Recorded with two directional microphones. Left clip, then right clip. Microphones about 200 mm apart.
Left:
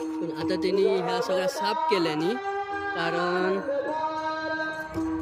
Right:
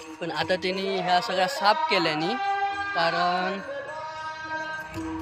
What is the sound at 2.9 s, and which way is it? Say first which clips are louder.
Speech: right 2 dB; 15° left (ahead or behind).